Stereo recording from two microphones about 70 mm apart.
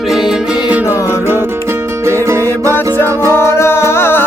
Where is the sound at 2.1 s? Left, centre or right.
Right.